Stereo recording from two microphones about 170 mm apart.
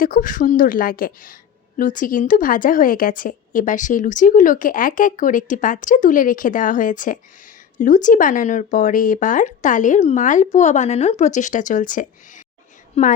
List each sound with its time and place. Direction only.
0.0 s a woman's voice: 55° left (ahead or behind)
13.0 s a woman's voice: 40° left (ahead or behind)